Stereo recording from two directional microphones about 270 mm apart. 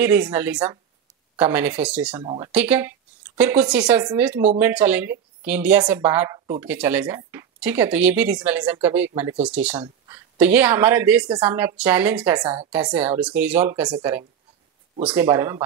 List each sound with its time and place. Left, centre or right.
0.0 s speech: centre
2.1 s speech: centre
2.5 s speech: centre